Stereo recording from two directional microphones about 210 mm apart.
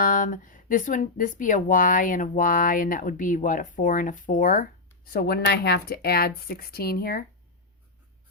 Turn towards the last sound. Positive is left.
turn(degrees=45)  # may be behind; listen again after turning